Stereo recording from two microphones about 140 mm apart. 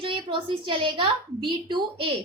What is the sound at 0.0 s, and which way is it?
A woman's voice, 35° right (ahead or behind).